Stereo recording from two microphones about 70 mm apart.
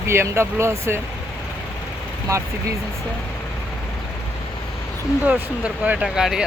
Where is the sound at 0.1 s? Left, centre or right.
Right.